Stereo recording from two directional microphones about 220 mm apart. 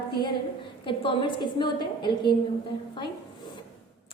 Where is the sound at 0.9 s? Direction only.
20° left (ahead or behind).